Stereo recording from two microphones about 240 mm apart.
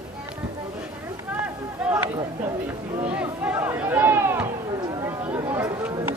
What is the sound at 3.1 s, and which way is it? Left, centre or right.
Chatter, centre.